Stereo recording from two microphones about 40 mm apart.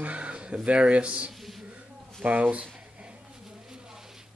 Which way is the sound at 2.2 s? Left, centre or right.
Right.